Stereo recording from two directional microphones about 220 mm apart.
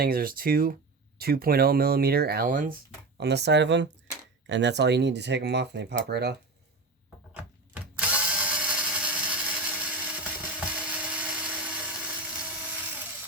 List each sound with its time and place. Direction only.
0.0 s speech: 40° right (ahead or behind)
3.2 s speech: 50° right (ahead or behind)
7.3 s drill: 5° right (ahead or behind)
10.7 s dental drill: 5° right (ahead or behind)